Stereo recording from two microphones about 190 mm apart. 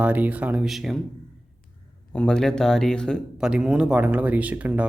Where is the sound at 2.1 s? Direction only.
5° left (ahead or behind).